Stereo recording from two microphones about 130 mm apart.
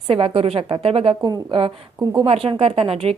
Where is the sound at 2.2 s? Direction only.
45° right (ahead or behind).